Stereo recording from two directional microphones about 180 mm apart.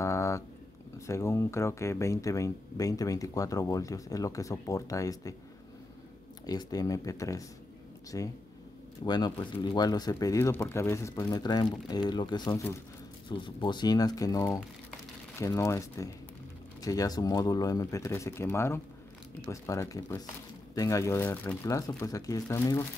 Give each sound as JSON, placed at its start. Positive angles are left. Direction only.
{"t": 0.0, "sound": "a sound", "side_deg": 15}
{"t": 0.9, "sound": "speech", "side_deg": 15}
{"t": 6.4, "sound": "speech", "side_deg": 20}